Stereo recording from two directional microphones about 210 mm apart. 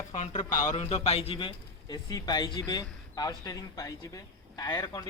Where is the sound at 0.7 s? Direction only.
30° left (ahead or behind).